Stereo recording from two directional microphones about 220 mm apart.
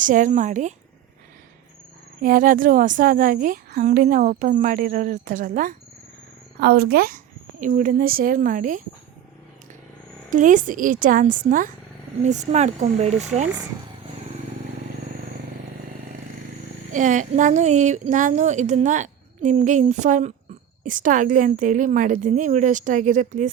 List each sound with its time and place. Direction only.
0.0 s a woman's voice: 35° right (ahead or behind)
2.2 s a woman's voice: 40° right (ahead or behind)
10.2 s a woman's voice: 35° right (ahead or behind)
16.9 s a woman's voice: 35° right (ahead or behind)